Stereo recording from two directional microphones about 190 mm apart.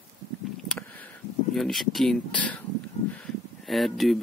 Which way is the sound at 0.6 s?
5° left (ahead or behind).